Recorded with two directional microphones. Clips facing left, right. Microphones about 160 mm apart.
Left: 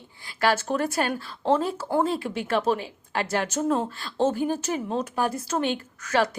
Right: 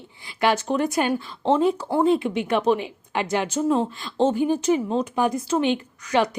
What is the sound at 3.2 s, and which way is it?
Speech, 15° right (ahead or behind).